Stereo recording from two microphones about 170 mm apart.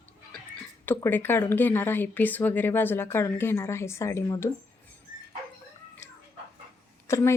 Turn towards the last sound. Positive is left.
turn(degrees=15)  # may be behind; listen again after turning